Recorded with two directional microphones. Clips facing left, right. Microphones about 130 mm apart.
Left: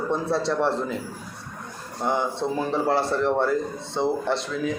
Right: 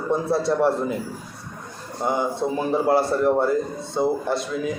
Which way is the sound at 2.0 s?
10° right (ahead or behind).